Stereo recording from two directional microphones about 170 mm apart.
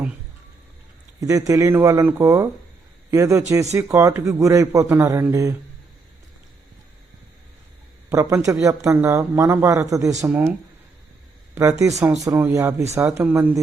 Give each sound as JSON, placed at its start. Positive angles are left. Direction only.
{"t": 1.2, "sound": "a man's voice", "side_deg": -20}
{"t": 8.1, "sound": "a man's voice", "side_deg": -20}
{"t": 11.8, "sound": "a man's voice", "side_deg": -20}